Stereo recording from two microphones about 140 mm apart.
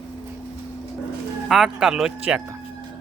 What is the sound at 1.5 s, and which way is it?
Speech, 5° right (ahead or behind).